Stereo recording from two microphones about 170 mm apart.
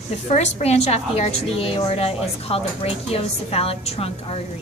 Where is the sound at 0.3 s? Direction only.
40° left (ahead or behind).